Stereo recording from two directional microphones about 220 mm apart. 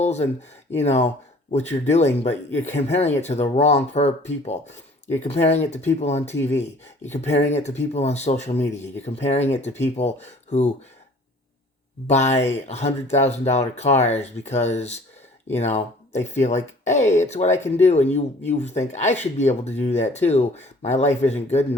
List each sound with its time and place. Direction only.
0.0 s a sound: 30° left (ahead or behind)
0.8 s speech: 30° left (ahead or behind)
6.3 s speech: 10° left (ahead or behind)
6.6 s speech: 30° left (ahead or behind)
12.1 s speech: 30° left (ahead or behind)
18.0 s speech: 10° left (ahead or behind)
18.6 s speech: 30° left (ahead or behind)